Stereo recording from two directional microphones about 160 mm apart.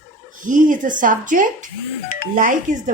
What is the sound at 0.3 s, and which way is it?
Speech, 55° right (ahead or behind).